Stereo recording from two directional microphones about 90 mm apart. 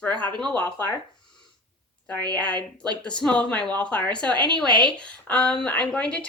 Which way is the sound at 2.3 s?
15° left (ahead or behind).